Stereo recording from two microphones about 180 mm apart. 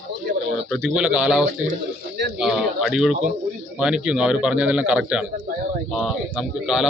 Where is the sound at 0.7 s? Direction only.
Centre (ahead or behind).